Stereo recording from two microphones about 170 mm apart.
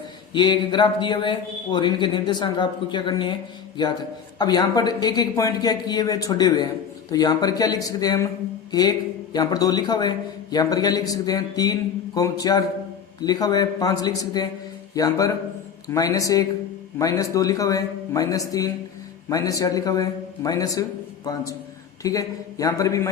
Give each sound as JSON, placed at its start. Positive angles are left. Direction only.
{"t": 0.3, "sound": "a man's voice", "side_deg": 25}
{"t": 4.4, "sound": "a man's voice", "side_deg": 25}